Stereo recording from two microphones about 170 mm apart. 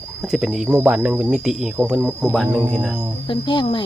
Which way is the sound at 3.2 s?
30° left (ahead or behind).